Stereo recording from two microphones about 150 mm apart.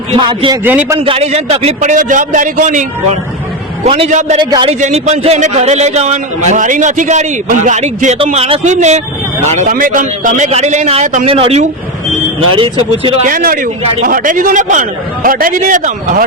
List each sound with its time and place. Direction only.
0.1 s a man's voice: 35° right (ahead or behind)
0.6 s a man's voice: 10° right (ahead or behind)
0.9 s a man's voice: 40° right (ahead or behind); by 3.2 s 55° right (ahead or behind)
3.8 s a man's voice: 40° right (ahead or behind)
4.1 s a man's voice: 50° right (ahead or behind)
4.4 s a man's voice: 30° right (ahead or behind)
4.8 s a man's voice: 50° right (ahead or behind)
8.2 s a man's voice: 40° right (ahead or behind)
9.6 s a man's voice: 70° right (ahead or behind)
11.3 s a man's voice: 40° right (ahead or behind)
13.0 s a man's voice: 40° right (ahead or behind)
13.2 s a man's voice: 70° right (ahead or behind)